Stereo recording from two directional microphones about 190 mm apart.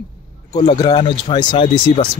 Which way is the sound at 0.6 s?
25° left (ahead or behind).